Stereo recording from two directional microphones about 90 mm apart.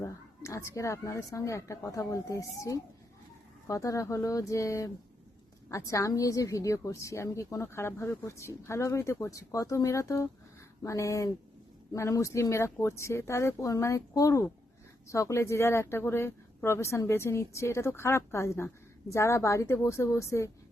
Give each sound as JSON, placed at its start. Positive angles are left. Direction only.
{"t": 0.0, "sound": "speech", "side_deg": 35}